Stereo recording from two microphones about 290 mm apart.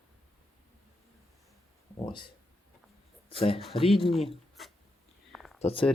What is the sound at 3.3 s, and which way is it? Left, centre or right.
Speech, centre.